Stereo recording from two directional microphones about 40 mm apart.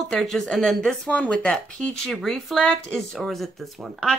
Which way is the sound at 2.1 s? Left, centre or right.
Centre.